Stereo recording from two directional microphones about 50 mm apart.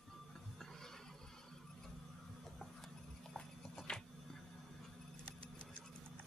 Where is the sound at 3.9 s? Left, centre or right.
Left.